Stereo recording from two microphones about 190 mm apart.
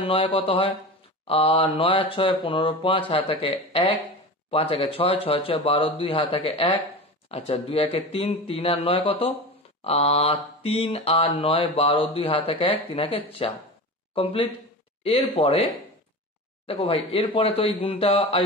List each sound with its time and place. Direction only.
0.0 s mantra: 30° left (ahead or behind)
7.2 s speech: 30° left (ahead or behind)
9.8 s mantra: 30° left (ahead or behind)
15.0 s speech: 30° left (ahead or behind)
16.6 s mantra: 30° left (ahead or behind)